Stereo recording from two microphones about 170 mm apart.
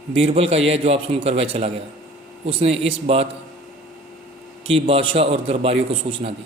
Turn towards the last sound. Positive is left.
turn(degrees=-35)  # may be behind; listen again after turning